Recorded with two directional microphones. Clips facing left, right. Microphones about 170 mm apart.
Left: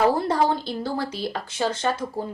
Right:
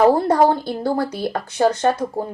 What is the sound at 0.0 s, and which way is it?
A woman's voice, 55° right (ahead or behind).